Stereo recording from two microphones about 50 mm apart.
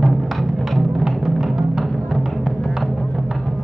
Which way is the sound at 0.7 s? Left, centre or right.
Centre.